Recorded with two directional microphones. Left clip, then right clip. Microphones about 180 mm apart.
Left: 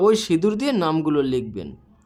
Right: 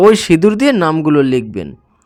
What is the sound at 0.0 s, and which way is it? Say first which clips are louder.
Speech: right 9 dB; 45° right (ahead or behind).